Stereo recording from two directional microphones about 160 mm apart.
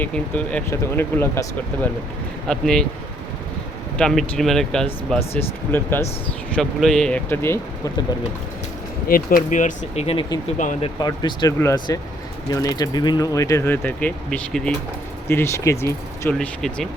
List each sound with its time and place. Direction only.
0.0 s speech: 5° left (ahead or behind)
3.9 s speech: 5° left (ahead or behind)
5.7 s speech: 15° left (ahead or behind)
6.6 s speech: centre (ahead or behind)
9.0 s speech: 60° left (ahead or behind); by 10.2 s 40° left (ahead or behind)
10.6 s speech: 50° left (ahead or behind)
10.8 s speech: 25° left (ahead or behind); by 14.7 s 5° left (ahead or behind)
15.3 s speech: 15° left (ahead or behind)
16.6 s speech: centre (ahead or behind)